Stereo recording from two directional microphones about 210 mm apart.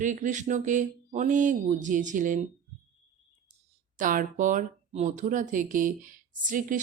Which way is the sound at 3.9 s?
40° right (ahead or behind).